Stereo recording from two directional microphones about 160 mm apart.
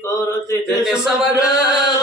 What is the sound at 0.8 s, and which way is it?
Speech, 5° right (ahead or behind).